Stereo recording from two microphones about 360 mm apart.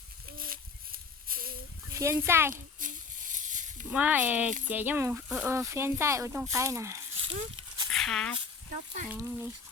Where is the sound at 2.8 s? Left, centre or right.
Right.